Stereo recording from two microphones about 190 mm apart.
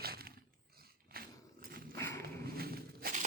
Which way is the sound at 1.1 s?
50° right (ahead or behind).